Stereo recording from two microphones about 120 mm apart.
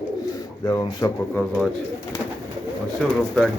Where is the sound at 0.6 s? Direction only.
35° left (ahead or behind).